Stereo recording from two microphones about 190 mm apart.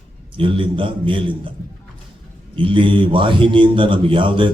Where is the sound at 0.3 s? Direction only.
25° right (ahead or behind).